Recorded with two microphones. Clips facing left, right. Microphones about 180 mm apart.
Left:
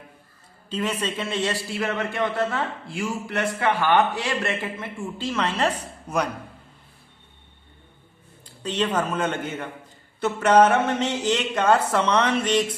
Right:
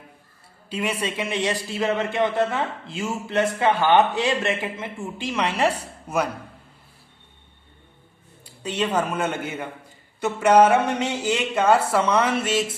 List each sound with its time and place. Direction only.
0.7 s a man's voice: 10° right (ahead or behind)
8.6 s a man's voice: 10° right (ahead or behind)